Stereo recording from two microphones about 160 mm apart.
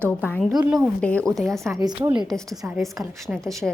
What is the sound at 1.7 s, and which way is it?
A woman's voice, 10° right (ahead or behind).